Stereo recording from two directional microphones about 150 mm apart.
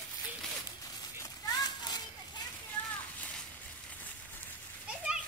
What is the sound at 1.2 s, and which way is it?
Children playing, 25° left (ahead or behind).